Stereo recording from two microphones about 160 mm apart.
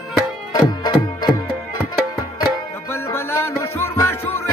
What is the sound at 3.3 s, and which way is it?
Music, 15° left (ahead or behind).